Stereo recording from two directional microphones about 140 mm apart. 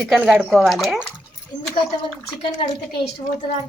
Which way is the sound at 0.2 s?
15° right (ahead or behind).